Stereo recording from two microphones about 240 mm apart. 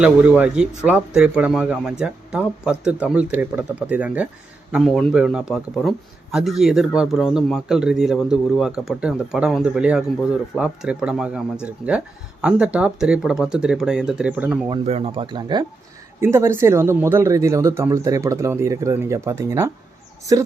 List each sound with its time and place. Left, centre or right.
0.0 s speech: centre
14.7 s speech: right